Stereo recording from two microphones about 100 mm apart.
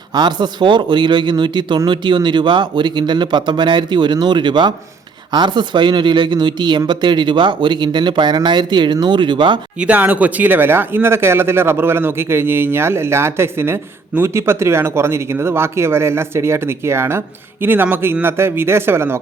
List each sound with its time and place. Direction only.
0.1 s speech: 45° right (ahead or behind)
9.7 s speech: 15° right (ahead or behind)